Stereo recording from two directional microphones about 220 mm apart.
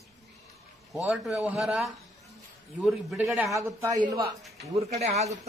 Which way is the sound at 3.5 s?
15° right (ahead or behind).